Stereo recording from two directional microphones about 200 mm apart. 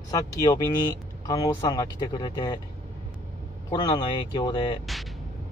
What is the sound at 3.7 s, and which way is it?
Speech, 20° left (ahead or behind).